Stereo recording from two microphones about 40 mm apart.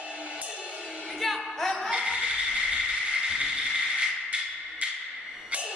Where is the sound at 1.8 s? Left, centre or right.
Right.